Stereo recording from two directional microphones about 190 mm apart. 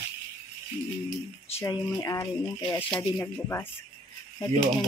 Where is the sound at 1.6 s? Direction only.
15° left (ahead or behind).